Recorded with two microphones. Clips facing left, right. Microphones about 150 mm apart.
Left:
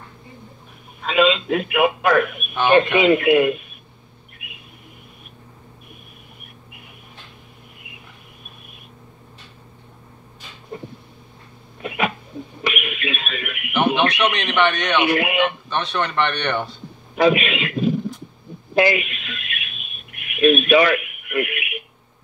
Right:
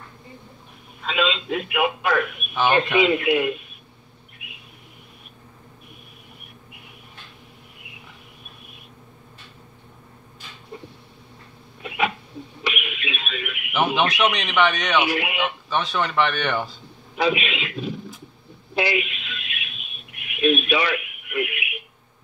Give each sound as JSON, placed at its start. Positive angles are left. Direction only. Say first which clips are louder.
{"t": 1.0, "sound": "speech", "louder": "left 7 dB", "side_deg": 55}
{"t": 2.5, "sound": "speech", "louder": "left 4 dB", "side_deg": 0}
{"t": 3.1, "sound": "speech", "louder": "left 6 dB", "side_deg": 55}
{"t": 11.8, "sound": "a sound", "louder": "left 1 dB", "side_deg": 55}
{"t": 13.7, "sound": "speech", "louder": "left 3 dB", "side_deg": 0}
{"t": 15.0, "sound": "speech", "louder": "left 5 dB", "side_deg": 55}
{"t": 15.3, "sound": "speech", "louder": "left 3 dB", "side_deg": 0}
{"t": 17.1, "sound": "a sound", "louder": "left 6 dB", "side_deg": 55}